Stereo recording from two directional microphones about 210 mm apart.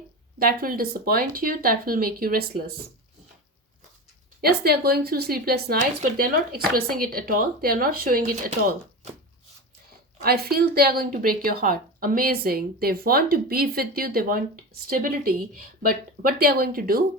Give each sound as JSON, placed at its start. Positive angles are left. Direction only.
{"t": 0.3, "sound": "a woman's voice", "side_deg": -45}
{"t": 4.4, "sound": "a woman's voice", "side_deg": -50}
{"t": 10.2, "sound": "a woman's voice", "side_deg": -45}